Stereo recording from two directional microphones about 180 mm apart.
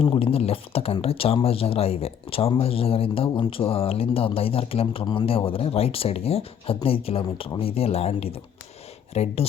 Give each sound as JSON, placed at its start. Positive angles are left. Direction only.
{"t": 0.0, "sound": "speech", "side_deg": 30}